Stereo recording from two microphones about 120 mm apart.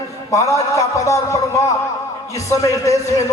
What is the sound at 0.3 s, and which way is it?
A man's voice, 25° left (ahead or behind).